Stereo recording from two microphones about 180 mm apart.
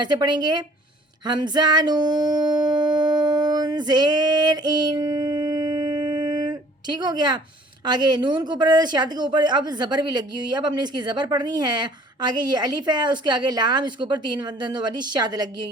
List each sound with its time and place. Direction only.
0.0 s a woman's voice: 25° right (ahead or behind)
1.2 s a sound: 25° right (ahead or behind)
7.9 s a woman's voice: 25° right (ahead or behind)